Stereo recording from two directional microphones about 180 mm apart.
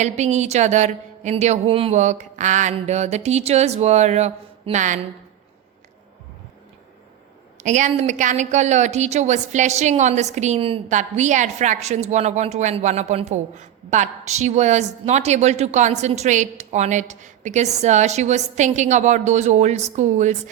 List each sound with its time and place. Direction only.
0.0 s a woman's voice: 40° right (ahead or behind)
7.6 s a woman's voice: 40° right (ahead or behind)